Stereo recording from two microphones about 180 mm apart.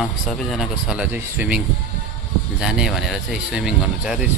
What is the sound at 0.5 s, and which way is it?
Speech, centre (ahead or behind).